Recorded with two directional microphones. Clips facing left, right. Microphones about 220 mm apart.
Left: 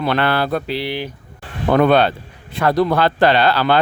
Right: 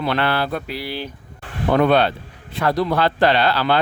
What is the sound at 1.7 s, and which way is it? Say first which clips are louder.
Speech: left 2 dB; 55° left (ahead or behind).